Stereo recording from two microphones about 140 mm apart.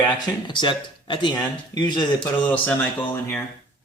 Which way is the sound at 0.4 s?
35° left (ahead or behind).